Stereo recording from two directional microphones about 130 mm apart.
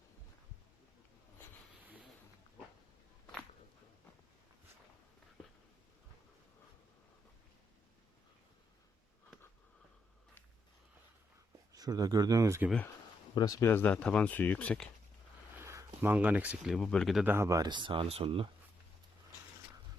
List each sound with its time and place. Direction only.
11.7 s speech: 30° right (ahead or behind)
13.3 s speech: 30° left (ahead or behind); by 14.8 s 10° left (ahead or behind)
15.5 s a sound: 20° right (ahead or behind)
16.7 s speech: 5° left (ahead or behind)
17.2 s speech: 20° right (ahead or behind); by 18.5 s 45° right (ahead or behind)